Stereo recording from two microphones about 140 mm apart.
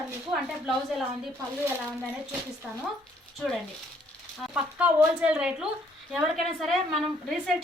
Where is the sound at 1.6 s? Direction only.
10° right (ahead or behind).